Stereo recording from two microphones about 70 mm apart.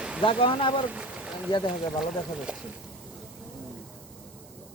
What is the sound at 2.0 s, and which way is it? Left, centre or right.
Speech, centre.